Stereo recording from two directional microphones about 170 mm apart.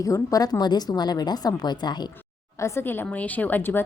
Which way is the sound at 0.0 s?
20° left (ahead or behind).